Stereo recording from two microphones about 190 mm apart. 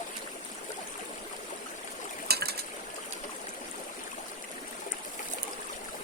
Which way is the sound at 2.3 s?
55° right (ahead or behind).